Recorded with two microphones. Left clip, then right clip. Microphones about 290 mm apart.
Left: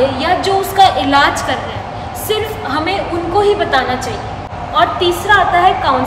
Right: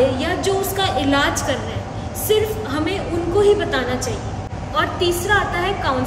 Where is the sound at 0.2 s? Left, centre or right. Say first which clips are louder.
Left 7 dB; centre.